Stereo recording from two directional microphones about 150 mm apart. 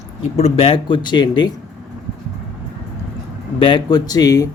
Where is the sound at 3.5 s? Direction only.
35° left (ahead or behind).